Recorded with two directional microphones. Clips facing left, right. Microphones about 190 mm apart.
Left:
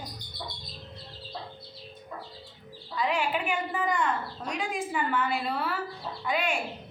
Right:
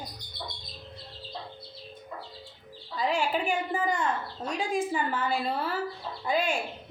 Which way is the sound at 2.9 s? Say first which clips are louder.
Right 1 dB; 40° right (ahead or behind).